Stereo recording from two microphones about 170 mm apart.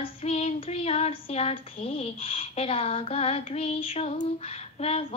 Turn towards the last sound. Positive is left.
turn(degrees=35)  # may be behind; listen again after turning